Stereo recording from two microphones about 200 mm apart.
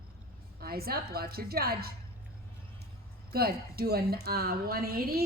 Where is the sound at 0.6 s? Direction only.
50° right (ahead or behind).